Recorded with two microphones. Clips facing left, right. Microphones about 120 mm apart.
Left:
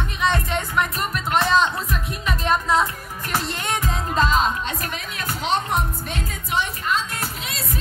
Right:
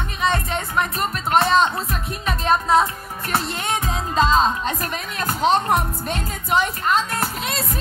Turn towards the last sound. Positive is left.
turn(degrees=-45)  # may be behind; listen again after turning